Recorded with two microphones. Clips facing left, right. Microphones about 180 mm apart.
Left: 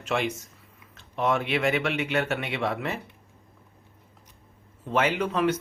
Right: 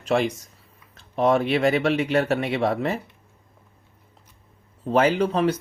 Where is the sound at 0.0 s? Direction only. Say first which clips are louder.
Right 5 dB; 35° right (ahead or behind).